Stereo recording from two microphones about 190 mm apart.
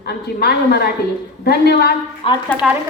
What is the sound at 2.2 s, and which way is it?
Speech, 25° left (ahead or behind).